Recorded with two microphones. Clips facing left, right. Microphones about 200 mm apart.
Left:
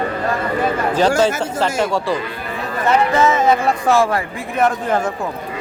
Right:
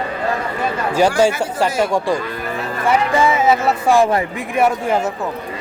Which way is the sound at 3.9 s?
20° right (ahead or behind).